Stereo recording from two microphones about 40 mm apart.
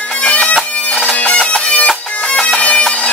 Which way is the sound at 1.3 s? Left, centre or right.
Left.